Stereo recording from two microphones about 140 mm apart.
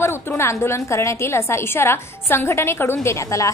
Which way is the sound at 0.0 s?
15° left (ahead or behind).